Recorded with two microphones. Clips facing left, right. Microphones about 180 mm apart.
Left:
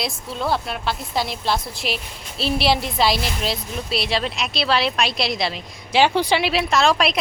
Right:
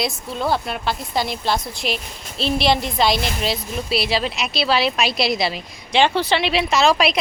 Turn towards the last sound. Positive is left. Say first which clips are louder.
# right 1 dB
turn(degrees=0)  # may be behind; listen again after turning